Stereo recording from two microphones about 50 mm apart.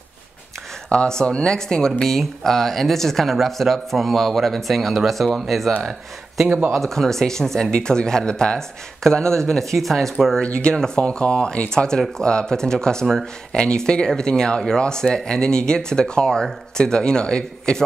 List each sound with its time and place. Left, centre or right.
0.8 s speech: centre
6.7 s speech: centre
10.4 s speech: centre